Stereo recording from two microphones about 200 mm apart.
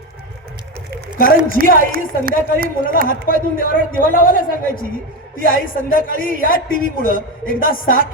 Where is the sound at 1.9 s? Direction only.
45° right (ahead or behind).